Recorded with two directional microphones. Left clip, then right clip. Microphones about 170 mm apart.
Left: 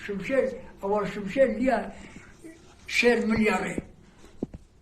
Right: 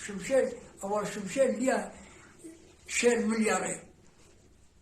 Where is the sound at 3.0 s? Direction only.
20° right (ahead or behind).